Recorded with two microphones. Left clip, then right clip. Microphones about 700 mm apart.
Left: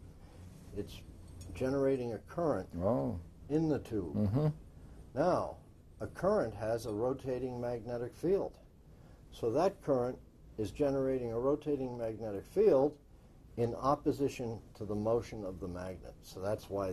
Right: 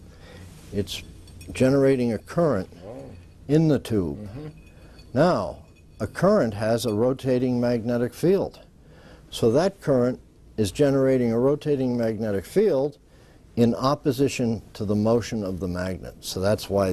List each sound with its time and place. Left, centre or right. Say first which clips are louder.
1.5 s speech: right 13 dB; right
5.1 s speech: right 10 dB; right